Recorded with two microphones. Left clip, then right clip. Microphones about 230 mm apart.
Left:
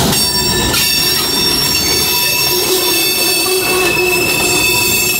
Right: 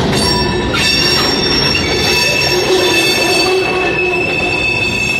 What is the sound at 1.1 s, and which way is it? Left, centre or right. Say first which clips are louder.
Train wheels squealing: right 1 dB; left.